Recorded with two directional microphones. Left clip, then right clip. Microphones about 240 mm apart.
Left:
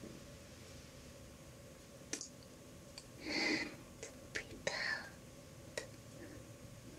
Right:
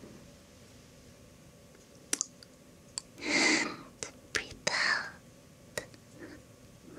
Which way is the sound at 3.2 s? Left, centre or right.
Right.